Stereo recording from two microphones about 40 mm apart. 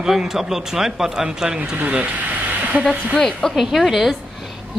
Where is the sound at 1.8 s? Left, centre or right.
Right.